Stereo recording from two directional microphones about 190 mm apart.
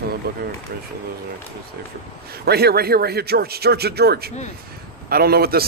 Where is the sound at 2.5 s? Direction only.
55° right (ahead or behind).